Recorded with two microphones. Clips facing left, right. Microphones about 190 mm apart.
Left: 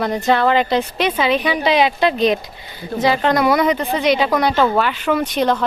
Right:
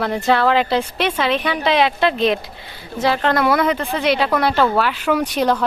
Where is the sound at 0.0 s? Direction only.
Centre (ahead or behind).